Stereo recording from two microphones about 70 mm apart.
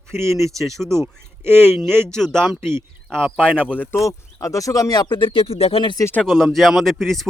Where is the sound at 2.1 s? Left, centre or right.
Centre.